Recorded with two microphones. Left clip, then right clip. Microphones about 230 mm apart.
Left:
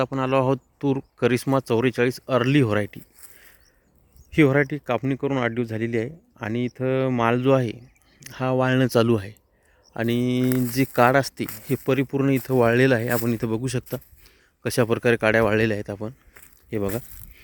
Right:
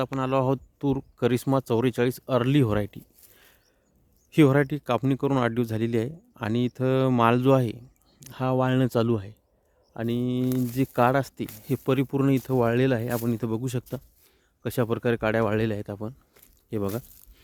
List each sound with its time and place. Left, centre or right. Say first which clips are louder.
0.0 s speech: left 4 dB; centre
10.8 s speech: left 4 dB; centre
11.7 s speech: left 2 dB; centre